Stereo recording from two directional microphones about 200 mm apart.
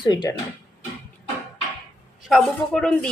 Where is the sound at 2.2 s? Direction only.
Centre (ahead or behind).